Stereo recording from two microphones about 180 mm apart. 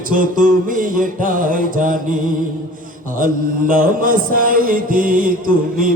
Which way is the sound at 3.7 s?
50° right (ahead or behind).